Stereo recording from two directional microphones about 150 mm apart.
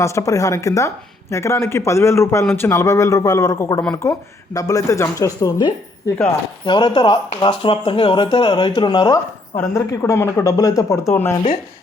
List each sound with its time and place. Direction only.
0.0 s speech: 20° left (ahead or behind)
11.3 s speech: 30° left (ahead or behind)